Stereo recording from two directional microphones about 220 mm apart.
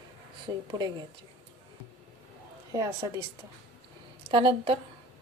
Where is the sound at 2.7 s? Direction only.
15° right (ahead or behind).